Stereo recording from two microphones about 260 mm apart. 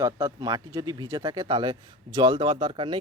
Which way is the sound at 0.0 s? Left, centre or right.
Centre.